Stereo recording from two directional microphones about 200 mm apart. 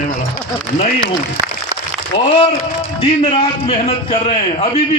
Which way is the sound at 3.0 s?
30° left (ahead or behind).